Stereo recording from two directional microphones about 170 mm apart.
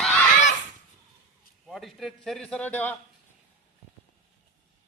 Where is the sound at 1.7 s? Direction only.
Centre (ahead or behind).